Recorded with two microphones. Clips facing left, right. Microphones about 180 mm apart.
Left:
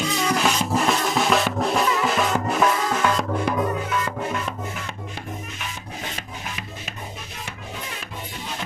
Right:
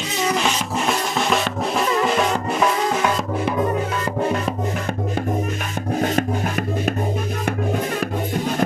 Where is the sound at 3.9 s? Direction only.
40° right (ahead or behind).